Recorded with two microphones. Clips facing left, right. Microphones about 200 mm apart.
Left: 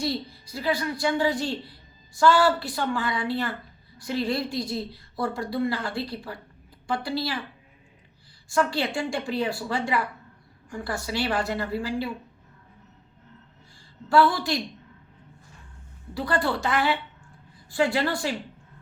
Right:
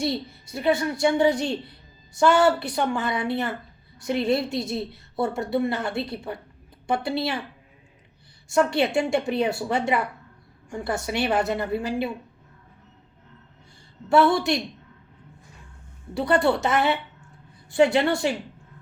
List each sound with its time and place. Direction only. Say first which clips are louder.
0.0 s a woman's voice: right 2 dB; 25° right (ahead or behind)
8.4 s a woman's voice: right 4 dB; 25° right (ahead or behind)
14.1 s a woman's voice: right 2 dB; 25° right (ahead or behind)
16.1 s a woman's voice: right 5 dB; 25° right (ahead or behind)